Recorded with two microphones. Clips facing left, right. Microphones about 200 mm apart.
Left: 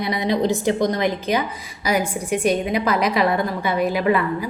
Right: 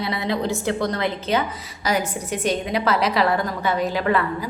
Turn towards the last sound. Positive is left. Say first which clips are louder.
# left 2 dB
turn(degrees=10)  # may be behind; listen again after turning